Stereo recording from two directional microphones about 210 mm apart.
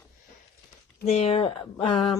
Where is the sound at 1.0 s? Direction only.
30° left (ahead or behind).